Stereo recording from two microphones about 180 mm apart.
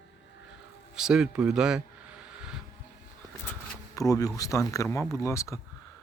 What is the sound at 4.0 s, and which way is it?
Speech, 20° left (ahead or behind).